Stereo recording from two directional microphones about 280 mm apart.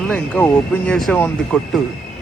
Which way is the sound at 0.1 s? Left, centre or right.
Centre.